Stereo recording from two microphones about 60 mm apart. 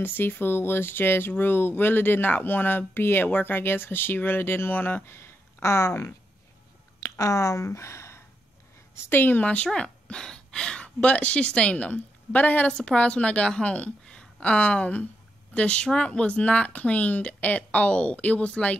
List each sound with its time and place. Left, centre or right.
0.0 s speech: left
7.0 s speech: left
8.9 s speech: left
9.5 s speech: centre